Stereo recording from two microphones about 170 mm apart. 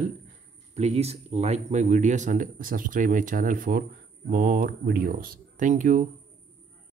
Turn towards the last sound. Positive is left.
turn(degrees=-45)  # may be behind; listen again after turning